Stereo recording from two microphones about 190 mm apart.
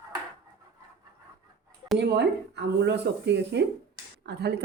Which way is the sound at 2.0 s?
65° right (ahead or behind).